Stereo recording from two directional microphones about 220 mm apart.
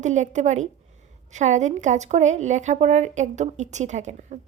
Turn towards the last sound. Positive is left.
turn(degrees=-30)  # may be behind; listen again after turning